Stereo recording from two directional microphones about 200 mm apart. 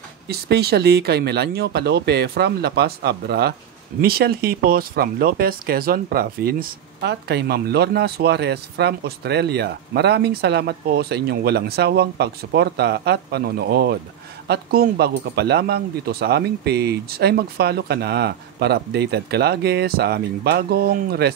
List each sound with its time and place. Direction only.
0.3 s speech: 50° right (ahead or behind)